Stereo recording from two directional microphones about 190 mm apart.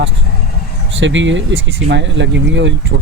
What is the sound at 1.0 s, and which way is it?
Speech, 75° right (ahead or behind).